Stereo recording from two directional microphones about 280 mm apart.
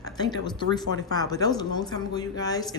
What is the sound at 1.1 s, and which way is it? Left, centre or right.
A woman's voice, centre.